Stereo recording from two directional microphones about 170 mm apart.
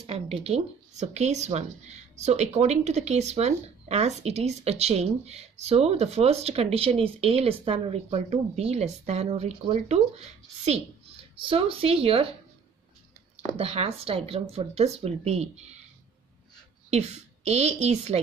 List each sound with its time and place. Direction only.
0.0 s speech: 35° right (ahead or behind)
13.5 s speech: 35° right (ahead or behind)
16.9 s speech: 40° right (ahead or behind)